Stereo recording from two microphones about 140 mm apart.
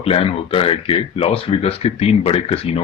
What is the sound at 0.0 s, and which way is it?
Speech, 45° left (ahead or behind).